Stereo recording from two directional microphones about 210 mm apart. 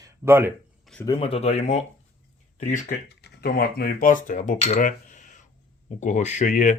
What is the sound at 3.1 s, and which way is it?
Speech, 50° left (ahead or behind).